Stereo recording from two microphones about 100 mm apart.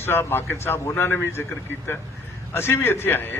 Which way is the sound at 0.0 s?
25° left (ahead or behind).